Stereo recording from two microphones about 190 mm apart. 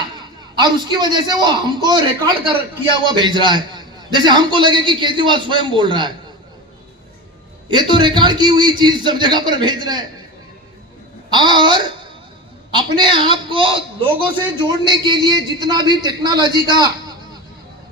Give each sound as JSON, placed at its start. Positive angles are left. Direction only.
{"t": 0.5, "sound": "a man's voice", "side_deg": -25}
{"t": 7.7, "sound": "a man's voice", "side_deg": -25}
{"t": 11.3, "sound": "a man's voice", "side_deg": -25}